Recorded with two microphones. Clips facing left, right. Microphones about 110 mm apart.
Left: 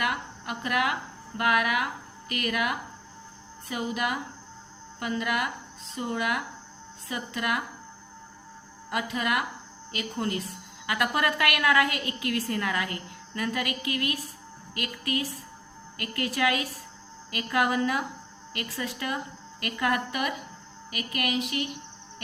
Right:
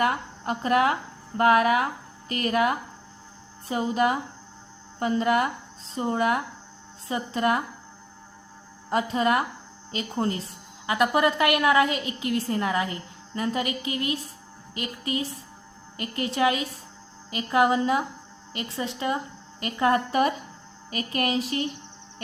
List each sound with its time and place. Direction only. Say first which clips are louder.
0.0 s a woman's voice: right 5 dB; 35° right (ahead or behind)
8.9 s a woman's voice: right 6 dB; 30° right (ahead or behind)